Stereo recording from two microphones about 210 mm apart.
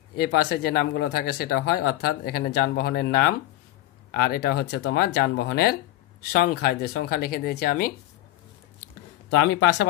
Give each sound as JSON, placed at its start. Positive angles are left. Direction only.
{"t": 0.1, "sound": "speech", "side_deg": 50}
{"t": 9.3, "sound": "speech", "side_deg": 55}